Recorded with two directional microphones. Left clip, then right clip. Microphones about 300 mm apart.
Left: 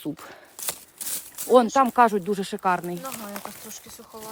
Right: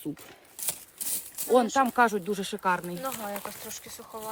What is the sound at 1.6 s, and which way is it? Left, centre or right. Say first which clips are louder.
Speech: left 5 dB; centre.